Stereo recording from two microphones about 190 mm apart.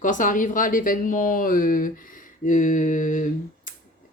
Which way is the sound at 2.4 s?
40° left (ahead or behind).